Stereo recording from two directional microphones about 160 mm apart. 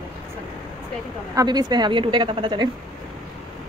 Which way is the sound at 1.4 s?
25° right (ahead or behind).